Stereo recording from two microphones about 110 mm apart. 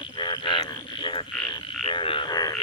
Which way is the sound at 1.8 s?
55° left (ahead or behind).